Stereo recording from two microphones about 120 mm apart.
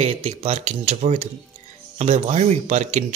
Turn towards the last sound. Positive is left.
turn(degrees=-85)